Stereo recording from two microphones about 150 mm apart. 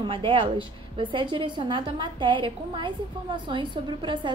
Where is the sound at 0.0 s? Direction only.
35° right (ahead or behind).